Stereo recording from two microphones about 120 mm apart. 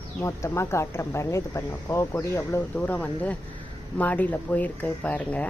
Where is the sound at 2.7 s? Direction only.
10° left (ahead or behind).